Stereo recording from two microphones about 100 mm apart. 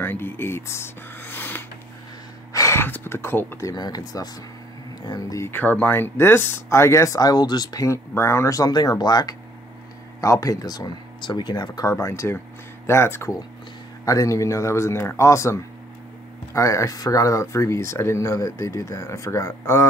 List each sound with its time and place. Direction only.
0.0 s speech: 20° left (ahead or behind)
2.5 s gasp: 30° left (ahead or behind)
3.7 s speech: 40° left (ahead or behind)
5.4 s speech: 20° left (ahead or behind); by 11.9 s 45° left (ahead or behind)
11.9 s speech: 30° left (ahead or behind)